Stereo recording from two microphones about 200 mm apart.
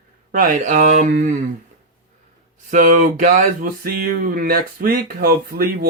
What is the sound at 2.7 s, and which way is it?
Speech, 40° right (ahead or behind).